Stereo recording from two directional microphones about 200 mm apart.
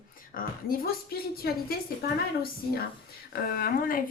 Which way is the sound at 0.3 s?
50° left (ahead or behind).